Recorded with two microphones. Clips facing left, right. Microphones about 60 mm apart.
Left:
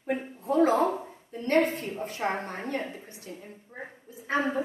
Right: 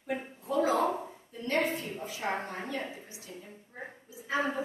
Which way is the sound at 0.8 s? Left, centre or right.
Centre.